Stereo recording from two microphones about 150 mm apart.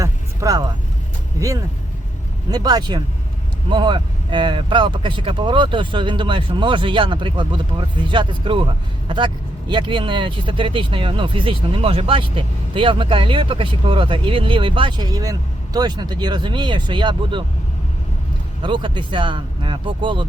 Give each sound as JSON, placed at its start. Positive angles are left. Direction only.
{"t": 0.0, "sound": "vehicle", "side_deg": -20}
{"t": 2.5, "sound": "speech", "side_deg": -25}
{"t": 18.6, "sound": "speech", "side_deg": -35}